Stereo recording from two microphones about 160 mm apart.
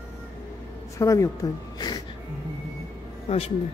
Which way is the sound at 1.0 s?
20° left (ahead or behind).